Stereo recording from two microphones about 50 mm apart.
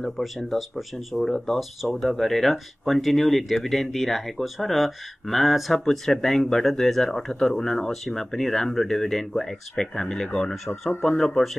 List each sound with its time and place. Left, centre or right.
0.0 s speech: centre